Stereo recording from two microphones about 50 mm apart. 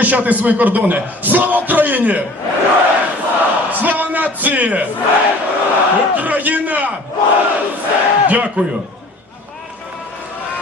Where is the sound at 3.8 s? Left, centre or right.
Right.